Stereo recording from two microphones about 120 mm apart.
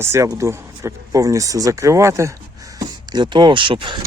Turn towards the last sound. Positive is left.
turn(degrees=-45)  # may be behind; listen again after turning